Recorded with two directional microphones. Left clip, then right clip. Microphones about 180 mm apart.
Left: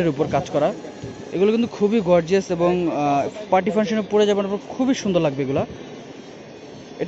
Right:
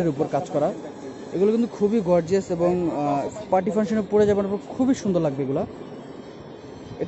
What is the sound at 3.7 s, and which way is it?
Speech, 5° right (ahead or behind).